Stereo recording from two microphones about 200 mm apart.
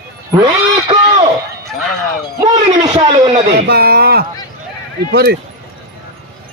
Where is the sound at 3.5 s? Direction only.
50° right (ahead or behind).